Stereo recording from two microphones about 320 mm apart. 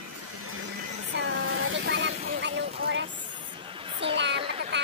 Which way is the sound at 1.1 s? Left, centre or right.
Right.